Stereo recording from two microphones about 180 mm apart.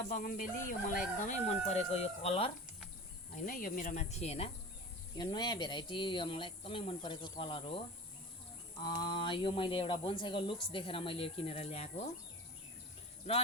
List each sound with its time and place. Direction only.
0.1 s speech: 50° left (ahead or behind); by 2.5 s 35° left (ahead or behind)
3.3 s speech: 45° left (ahead or behind)
5.1 s speech: 25° left (ahead or behind)
8.8 s speech: 25° left (ahead or behind)